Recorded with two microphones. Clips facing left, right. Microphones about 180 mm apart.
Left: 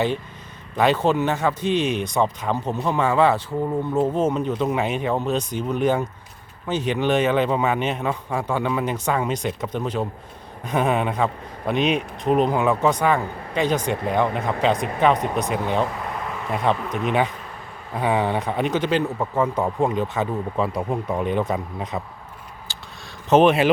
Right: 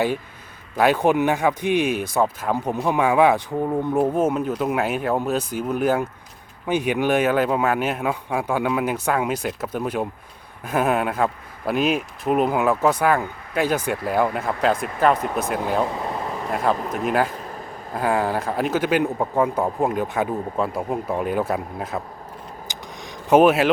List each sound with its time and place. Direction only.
0.8 s speech: 10° right (ahead or behind)
16.0 s air conditioning: 30° right (ahead or behind)
16.5 s speech: centre (ahead or behind)
23.3 s speech: 5° right (ahead or behind)